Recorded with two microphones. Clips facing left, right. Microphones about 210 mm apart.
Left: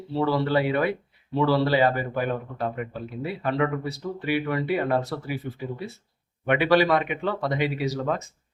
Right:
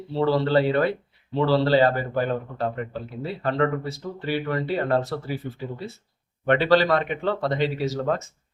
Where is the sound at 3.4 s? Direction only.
15° left (ahead or behind).